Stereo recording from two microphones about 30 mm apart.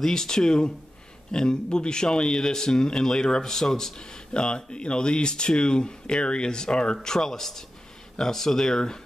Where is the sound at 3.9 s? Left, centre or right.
Left.